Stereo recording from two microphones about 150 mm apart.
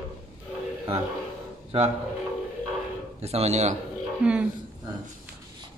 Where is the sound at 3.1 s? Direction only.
45° right (ahead or behind).